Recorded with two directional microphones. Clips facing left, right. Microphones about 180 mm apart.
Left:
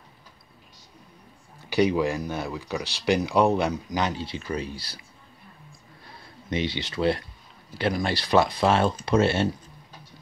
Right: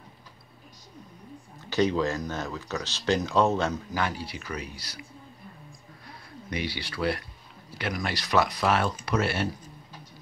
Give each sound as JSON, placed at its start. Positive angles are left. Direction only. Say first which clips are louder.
{"t": 1.7, "sound": "speech", "louder": "left 3 dB", "side_deg": 10}
{"t": 6.5, "sound": "speech", "louder": "left 5 dB", "side_deg": 20}